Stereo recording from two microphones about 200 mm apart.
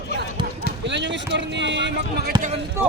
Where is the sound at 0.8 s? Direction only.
60° right (ahead or behind).